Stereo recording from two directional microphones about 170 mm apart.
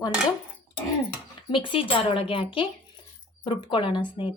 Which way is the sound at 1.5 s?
30° left (ahead or behind).